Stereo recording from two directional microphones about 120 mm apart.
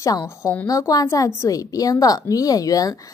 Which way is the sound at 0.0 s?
30° left (ahead or behind).